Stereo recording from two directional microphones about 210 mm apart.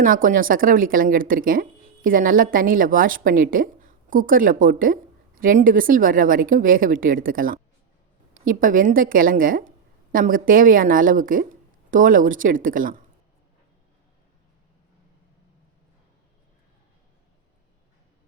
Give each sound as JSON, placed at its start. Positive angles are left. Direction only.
{"t": 0.0, "sound": "a woman's voice", "side_deg": -40}